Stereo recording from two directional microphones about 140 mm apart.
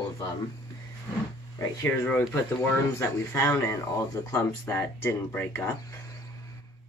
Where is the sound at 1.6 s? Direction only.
15° left (ahead or behind).